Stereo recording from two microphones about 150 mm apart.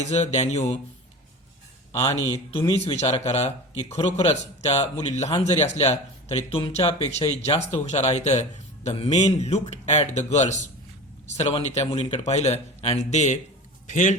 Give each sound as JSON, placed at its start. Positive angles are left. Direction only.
{"t": 0.0, "sound": "speech", "side_deg": 50}
{"t": 2.2, "sound": "speech", "side_deg": 40}